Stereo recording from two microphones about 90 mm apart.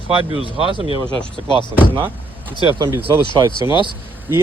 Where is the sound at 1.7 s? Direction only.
20° right (ahead or behind).